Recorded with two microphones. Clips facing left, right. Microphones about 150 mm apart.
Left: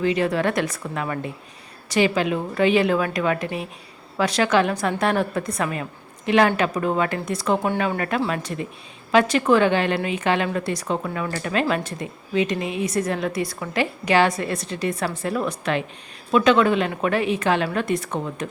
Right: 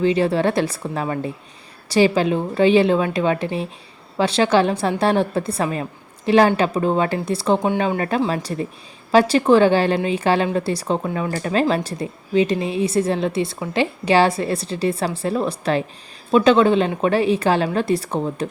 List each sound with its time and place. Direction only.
0.0 s a woman's voice: 30° right (ahead or behind)